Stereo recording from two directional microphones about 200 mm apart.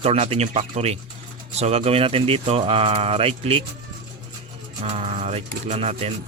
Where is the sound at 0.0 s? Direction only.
30° right (ahead or behind).